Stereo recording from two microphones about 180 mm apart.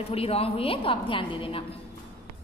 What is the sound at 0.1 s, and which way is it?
A woman's voice, 35° left (ahead or behind).